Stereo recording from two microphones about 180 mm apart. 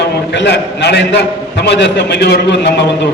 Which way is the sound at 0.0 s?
70° left (ahead or behind).